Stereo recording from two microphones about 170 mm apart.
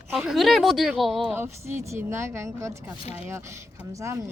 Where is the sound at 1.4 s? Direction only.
15° right (ahead or behind).